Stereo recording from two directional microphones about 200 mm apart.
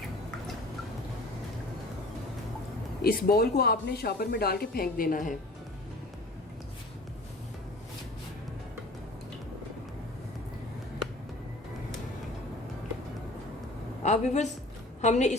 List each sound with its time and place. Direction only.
3.0 s speech: 50° left (ahead or behind)
14.0 s a woman's voice: 35° left (ahead or behind)